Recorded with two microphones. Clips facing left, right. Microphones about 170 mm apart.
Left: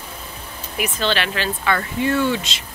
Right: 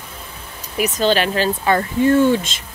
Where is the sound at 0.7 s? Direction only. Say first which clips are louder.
Right 5 dB; 40° right (ahead or behind).